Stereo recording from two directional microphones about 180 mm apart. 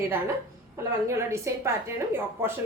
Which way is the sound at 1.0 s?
15° right (ahead or behind).